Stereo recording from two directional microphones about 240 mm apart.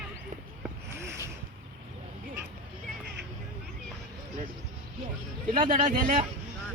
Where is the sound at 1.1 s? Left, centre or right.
Centre.